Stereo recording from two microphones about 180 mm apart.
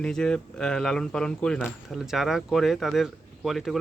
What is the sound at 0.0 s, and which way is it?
Speech, 5° left (ahead or behind).